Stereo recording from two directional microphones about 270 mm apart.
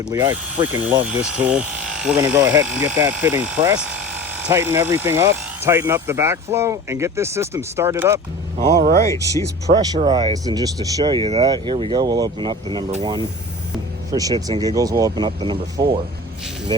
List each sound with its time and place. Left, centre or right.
0.1 s speech: centre
8.5 s speech: right
9.0 s speech: centre
9.8 s speech: centre